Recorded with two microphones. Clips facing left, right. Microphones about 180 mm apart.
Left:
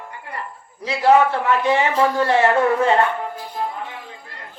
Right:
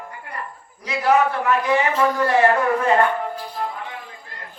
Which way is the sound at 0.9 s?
30° left (ahead or behind).